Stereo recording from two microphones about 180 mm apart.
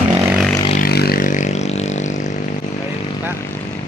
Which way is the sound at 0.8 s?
60° left (ahead or behind).